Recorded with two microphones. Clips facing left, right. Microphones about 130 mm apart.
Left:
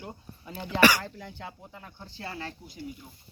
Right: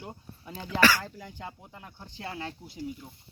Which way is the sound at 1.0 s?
10° right (ahead or behind).